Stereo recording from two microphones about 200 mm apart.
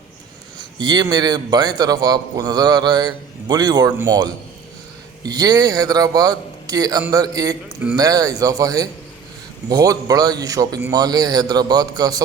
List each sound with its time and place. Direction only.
0.6 s a man's voice: 20° right (ahead or behind)